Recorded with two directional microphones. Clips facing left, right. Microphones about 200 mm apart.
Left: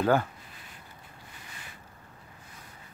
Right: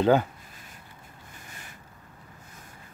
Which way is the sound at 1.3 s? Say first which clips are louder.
Right 2 dB; 45° right (ahead or behind).